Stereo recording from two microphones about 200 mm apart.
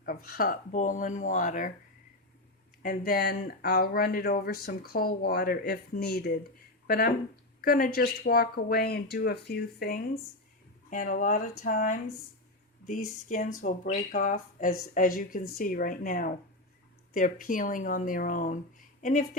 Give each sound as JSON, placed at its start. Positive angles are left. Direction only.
{"t": 0.0, "sound": "speech", "side_deg": 50}
{"t": 2.8, "sound": "speech", "side_deg": 45}
{"t": 13.2, "sound": "speech", "side_deg": 40}